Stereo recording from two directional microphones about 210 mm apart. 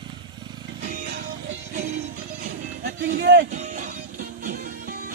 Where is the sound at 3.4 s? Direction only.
35° right (ahead or behind).